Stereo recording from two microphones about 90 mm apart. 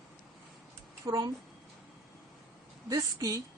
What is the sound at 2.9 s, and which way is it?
Speech, 40° right (ahead or behind).